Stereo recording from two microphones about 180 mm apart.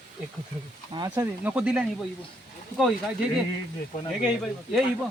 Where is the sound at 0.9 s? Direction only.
25° right (ahead or behind).